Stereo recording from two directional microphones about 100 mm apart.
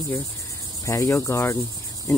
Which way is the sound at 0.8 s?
30° left (ahead or behind).